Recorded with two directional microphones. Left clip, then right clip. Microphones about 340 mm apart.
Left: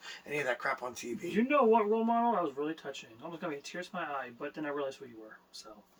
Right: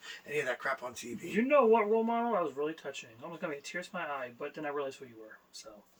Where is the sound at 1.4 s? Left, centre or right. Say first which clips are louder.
Right 1 dB; centre.